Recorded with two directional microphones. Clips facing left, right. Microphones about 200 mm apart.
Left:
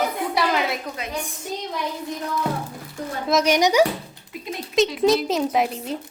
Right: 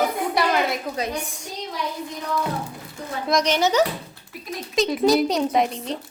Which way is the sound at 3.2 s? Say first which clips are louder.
Left 2 dB; 5° left (ahead or behind).